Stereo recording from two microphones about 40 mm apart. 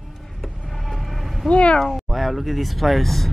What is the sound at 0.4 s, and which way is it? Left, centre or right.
Vehicle, centre.